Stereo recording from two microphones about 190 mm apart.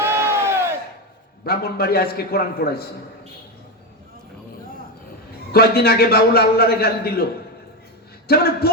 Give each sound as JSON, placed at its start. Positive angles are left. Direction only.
{"t": 0.0, "sound": "crowd", "side_deg": -15}
{"t": 1.5, "sound": "a man's voice", "side_deg": 55}
{"t": 5.5, "sound": "a man's voice", "side_deg": 55}
{"t": 8.3, "sound": "a man's voice", "side_deg": 55}